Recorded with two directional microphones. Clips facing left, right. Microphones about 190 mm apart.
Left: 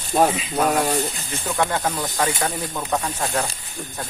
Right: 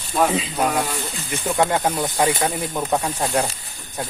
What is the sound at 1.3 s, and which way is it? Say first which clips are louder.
Speech: right 7 dB; 20° right (ahead or behind).